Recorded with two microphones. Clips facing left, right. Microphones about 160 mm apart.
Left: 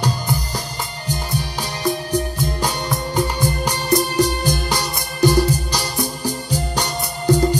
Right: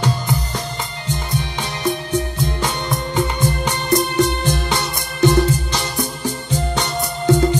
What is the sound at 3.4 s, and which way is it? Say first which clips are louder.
Music: right 1 dB; 35° left (ahead or behind).